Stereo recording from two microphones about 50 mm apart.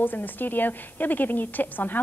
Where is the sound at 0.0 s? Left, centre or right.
Left.